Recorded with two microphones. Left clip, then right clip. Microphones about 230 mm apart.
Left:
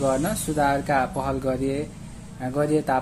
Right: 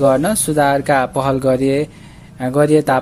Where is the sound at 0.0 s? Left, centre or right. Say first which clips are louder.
Right 10 dB; right.